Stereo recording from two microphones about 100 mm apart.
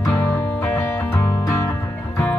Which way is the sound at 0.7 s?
30° left (ahead or behind).